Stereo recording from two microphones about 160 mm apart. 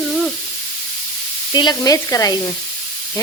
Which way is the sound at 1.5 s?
25° left (ahead or behind).